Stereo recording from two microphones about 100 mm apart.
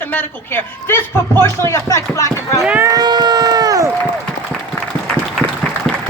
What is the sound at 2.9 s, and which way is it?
Speech, 45° right (ahead or behind).